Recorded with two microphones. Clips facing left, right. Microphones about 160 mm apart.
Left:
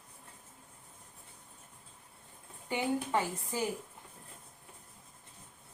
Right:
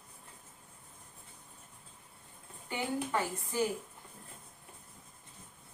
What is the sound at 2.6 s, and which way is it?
Speech, 20° left (ahead or behind).